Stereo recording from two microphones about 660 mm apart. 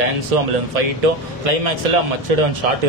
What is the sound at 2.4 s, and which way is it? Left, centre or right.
Speech, right.